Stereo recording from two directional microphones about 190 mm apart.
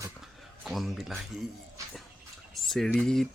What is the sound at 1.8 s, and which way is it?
Music, 15° right (ahead or behind).